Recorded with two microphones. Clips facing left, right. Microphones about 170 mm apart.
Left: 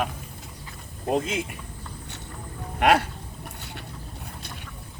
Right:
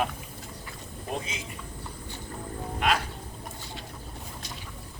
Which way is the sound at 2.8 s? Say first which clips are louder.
Left 7 dB; 65° left (ahead or behind).